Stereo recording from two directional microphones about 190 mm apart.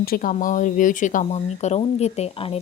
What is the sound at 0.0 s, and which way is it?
Speech, 50° left (ahead or behind).